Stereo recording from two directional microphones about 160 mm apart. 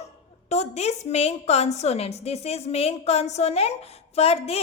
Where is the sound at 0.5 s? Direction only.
40° left (ahead or behind).